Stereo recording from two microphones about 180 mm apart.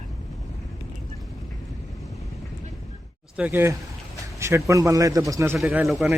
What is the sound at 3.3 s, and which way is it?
Speech, 10° right (ahead or behind).